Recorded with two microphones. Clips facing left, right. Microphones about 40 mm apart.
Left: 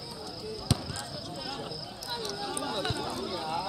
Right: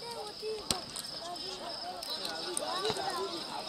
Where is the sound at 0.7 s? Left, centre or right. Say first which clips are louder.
Left 10 dB; centre.